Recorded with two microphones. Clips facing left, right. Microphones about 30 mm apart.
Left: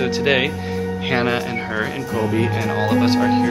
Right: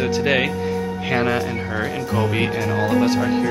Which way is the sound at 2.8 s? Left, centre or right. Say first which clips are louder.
Left 1 dB; left.